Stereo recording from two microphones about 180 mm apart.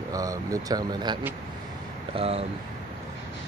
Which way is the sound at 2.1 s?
35° right (ahead or behind).